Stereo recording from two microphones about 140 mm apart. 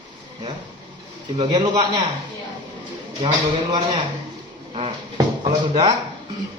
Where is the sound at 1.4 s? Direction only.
35° right (ahead or behind).